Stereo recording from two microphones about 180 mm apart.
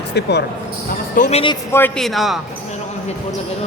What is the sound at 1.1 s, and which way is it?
Speech, 45° left (ahead or behind).